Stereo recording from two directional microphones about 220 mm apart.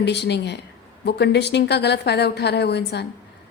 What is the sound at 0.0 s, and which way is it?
A woman's voice, 50° left (ahead or behind).